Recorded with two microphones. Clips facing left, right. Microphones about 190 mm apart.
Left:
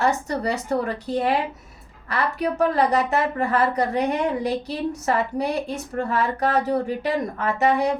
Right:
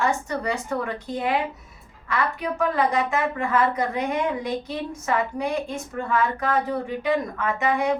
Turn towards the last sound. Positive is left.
turn(degrees=35)  # may be behind; listen again after turning